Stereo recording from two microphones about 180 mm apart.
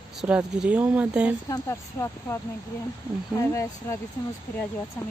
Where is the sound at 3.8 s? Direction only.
15° left (ahead or behind).